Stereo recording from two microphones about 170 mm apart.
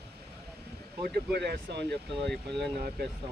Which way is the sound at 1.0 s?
70° right (ahead or behind).